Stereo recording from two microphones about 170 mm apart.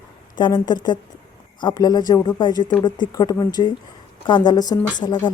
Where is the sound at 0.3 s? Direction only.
25° left (ahead or behind).